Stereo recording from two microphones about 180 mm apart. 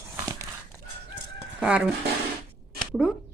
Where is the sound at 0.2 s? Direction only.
15° right (ahead or behind).